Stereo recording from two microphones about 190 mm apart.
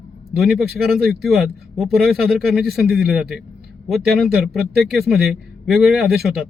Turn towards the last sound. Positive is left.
turn(degrees=0)  # may be behind; listen again after turning